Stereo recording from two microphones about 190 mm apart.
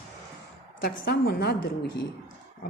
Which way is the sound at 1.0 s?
55° left (ahead or behind).